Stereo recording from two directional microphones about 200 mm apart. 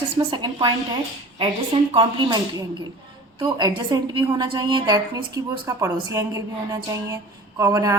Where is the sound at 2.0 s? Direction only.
20° right (ahead or behind).